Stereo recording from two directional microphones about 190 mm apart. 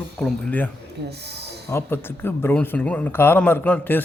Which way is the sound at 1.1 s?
60° right (ahead or behind).